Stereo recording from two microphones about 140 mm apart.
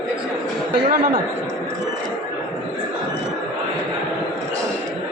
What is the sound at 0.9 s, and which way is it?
Speech, 80° right.